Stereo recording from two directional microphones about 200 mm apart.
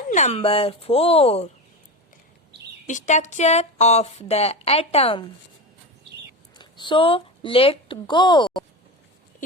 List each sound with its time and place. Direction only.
0.1 s speech: 35° left (ahead or behind)
2.8 s speech: 35° left (ahead or behind)
6.6 s speech: 25° left (ahead or behind)